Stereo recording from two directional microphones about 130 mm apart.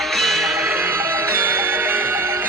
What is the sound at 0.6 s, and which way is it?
Music, 15° right (ahead or behind).